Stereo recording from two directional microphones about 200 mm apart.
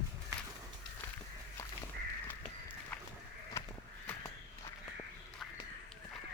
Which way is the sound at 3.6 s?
15° left (ahead or behind).